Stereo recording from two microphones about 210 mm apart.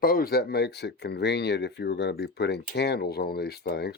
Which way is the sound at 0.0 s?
45° left (ahead or behind).